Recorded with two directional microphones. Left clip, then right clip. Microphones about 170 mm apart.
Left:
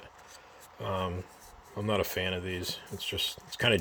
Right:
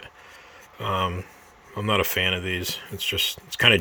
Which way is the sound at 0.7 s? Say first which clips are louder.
Right 8 dB; 20° right (ahead or behind).